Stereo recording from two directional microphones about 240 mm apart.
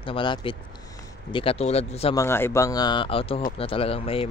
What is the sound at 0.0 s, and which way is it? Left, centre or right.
Speech, left.